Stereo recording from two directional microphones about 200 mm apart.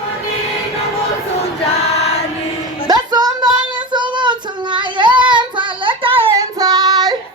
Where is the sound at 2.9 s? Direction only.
20° right (ahead or behind).